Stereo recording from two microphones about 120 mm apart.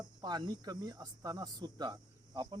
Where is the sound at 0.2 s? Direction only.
35° right (ahead or behind).